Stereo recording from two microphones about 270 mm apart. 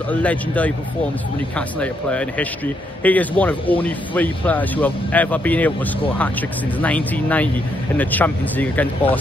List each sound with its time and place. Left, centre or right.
0.2 s speech: centre
1.8 s speech: centre
6.8 s speech: centre